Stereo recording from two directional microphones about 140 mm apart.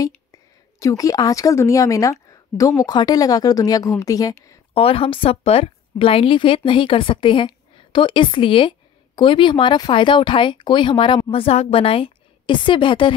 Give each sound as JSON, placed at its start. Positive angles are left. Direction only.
{"t": 0.0, "sound": "a woman's voice", "side_deg": 25}
{"t": 4.7, "sound": "a woman's voice", "side_deg": 40}